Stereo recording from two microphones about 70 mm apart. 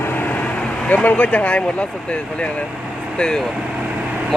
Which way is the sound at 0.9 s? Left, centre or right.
Left.